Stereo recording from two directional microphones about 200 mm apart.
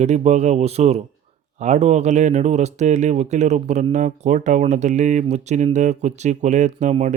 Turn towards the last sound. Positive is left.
turn(degrees=-35)  # may be behind; listen again after turning